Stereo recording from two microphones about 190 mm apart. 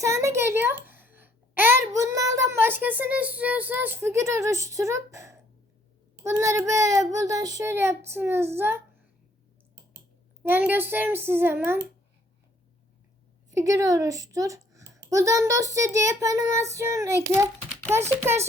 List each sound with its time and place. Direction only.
0.0 s a sound: 15° right (ahead or behind)
0.9 s a child's voice: 10° right (ahead or behind)
10.4 s a child's voice: 10° right (ahead or behind)
13.5 s a woman's voice: 15° right (ahead or behind)